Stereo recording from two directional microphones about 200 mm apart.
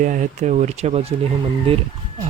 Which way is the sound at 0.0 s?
40° right (ahead or behind).